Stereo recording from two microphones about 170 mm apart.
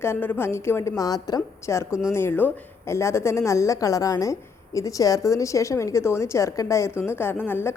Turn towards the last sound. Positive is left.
turn(degrees=15)  # may be behind; listen again after turning